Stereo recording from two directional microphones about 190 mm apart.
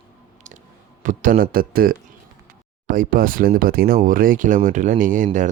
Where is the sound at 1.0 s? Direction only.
45° right (ahead or behind).